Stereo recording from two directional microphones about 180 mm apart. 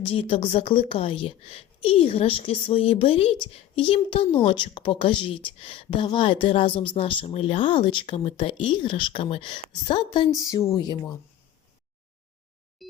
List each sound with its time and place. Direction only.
0.0 s a woman's voice: 30° left (ahead or behind)
12.8 s busy signal: centre (ahead or behind)